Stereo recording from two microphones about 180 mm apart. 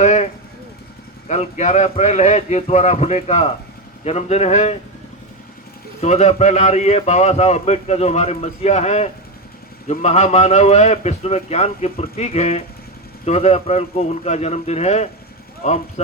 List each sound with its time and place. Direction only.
0.0 s vehicle: 40° left (ahead or behind)
1.3 s a man's voice: 40° left (ahead or behind)
6.0 s a man's voice: 35° left (ahead or behind)